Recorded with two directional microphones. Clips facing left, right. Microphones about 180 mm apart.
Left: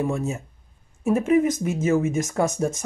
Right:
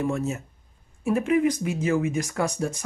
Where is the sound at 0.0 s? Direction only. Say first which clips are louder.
Left 1 dB; 10° left (ahead or behind).